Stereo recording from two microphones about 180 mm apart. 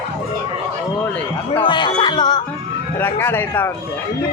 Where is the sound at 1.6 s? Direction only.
25° left (ahead or behind).